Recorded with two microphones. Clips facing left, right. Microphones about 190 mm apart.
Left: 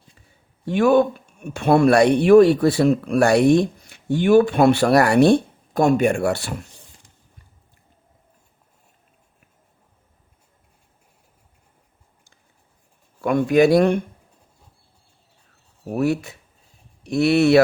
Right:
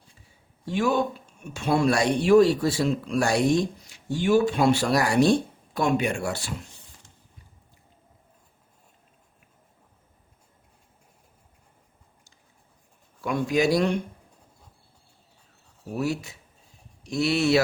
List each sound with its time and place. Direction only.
0.6 s speech: 55° left (ahead or behind)
5.7 s speech: 45° left (ahead or behind)
13.2 s speech: 55° left (ahead or behind)
15.9 s speech: 55° left (ahead or behind)